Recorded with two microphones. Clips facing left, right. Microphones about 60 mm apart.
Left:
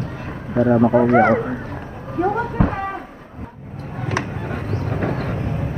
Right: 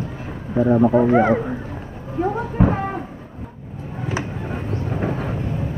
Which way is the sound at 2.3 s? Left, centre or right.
Left.